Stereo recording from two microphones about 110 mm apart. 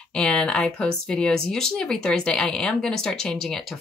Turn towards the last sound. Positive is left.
turn(degrees=5)  # may be behind; listen again after turning